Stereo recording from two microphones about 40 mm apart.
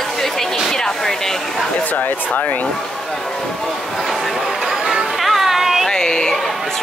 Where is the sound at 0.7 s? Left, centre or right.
Centre.